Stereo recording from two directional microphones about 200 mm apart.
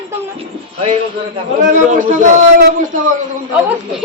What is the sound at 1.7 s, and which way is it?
Speech, 40° right (ahead or behind).